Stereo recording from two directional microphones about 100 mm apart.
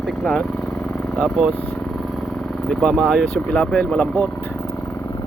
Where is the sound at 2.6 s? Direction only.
5° left (ahead or behind).